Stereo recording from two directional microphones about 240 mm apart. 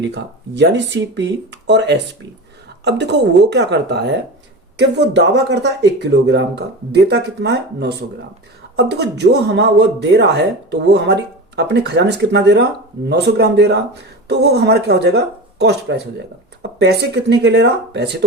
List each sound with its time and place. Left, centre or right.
0.0 s speech: right